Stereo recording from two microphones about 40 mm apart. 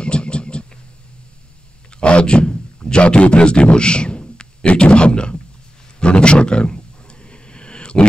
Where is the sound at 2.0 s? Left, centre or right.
Left.